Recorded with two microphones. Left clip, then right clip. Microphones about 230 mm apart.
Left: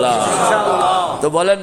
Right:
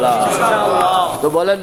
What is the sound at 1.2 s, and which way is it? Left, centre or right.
Mantra, left.